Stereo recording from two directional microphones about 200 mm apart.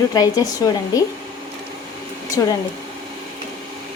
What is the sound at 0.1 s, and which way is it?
Speech, 20° left (ahead or behind).